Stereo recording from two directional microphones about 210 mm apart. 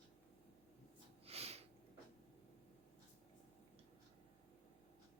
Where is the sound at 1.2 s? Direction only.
30° right (ahead or behind).